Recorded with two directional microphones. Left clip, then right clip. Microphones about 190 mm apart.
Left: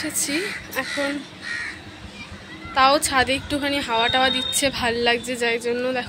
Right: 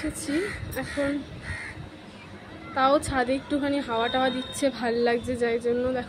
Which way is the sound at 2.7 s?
10° right (ahead or behind).